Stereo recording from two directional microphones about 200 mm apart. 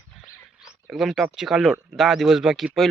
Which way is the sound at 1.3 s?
Centre (ahead or behind).